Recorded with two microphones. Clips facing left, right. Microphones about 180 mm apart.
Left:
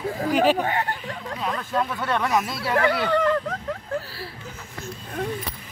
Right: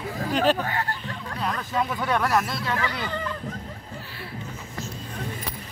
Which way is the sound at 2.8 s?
65° left (ahead or behind).